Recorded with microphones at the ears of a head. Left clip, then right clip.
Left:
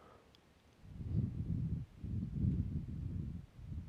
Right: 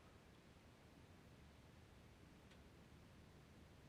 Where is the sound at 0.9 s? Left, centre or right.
Left.